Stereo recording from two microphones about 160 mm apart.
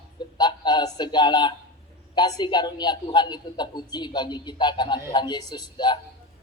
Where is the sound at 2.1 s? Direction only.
30° left (ahead or behind).